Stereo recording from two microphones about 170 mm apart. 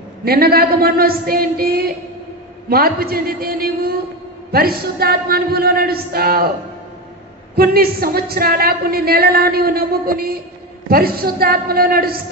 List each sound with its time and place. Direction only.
0.2 s a woman's voice: 65° right (ahead or behind)
7.5 s a woman's voice: 60° right (ahead or behind)